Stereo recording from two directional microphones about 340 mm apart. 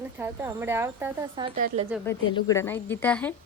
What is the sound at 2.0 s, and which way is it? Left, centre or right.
A woman's voice, centre.